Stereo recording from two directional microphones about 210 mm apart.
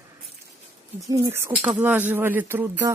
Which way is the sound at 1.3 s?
10° right (ahead or behind).